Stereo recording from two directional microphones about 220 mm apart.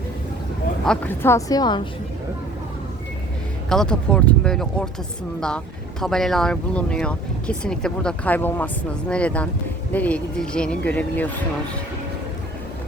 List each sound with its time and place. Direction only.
0.9 s a woman's voice: 10° left (ahead or behind)
3.7 s speech: 5° left (ahead or behind)